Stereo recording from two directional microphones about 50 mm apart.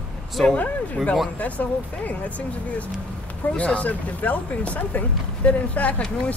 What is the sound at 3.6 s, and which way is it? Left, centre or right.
Speech, left.